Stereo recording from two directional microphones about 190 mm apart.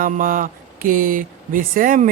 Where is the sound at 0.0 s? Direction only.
45° right (ahead or behind).